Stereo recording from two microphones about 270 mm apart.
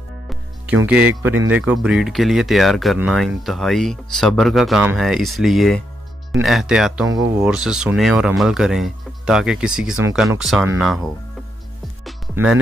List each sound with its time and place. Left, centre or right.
0.8 s speech: centre
7.1 s speech: right
7.3 s speech: centre
12.0 s music: centre